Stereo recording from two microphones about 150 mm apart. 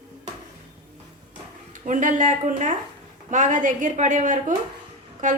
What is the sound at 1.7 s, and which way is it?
A woman's voice, 55° right (ahead or behind).